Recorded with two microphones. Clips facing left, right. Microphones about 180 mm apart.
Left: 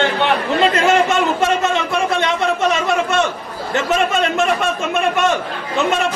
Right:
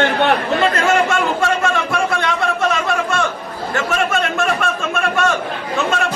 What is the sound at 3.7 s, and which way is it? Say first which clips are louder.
Chatter: left 2 dB; 20° left (ahead or behind).